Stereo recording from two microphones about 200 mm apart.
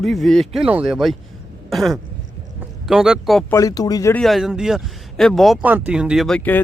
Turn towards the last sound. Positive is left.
turn(degrees=5)  # may be behind; listen again after turning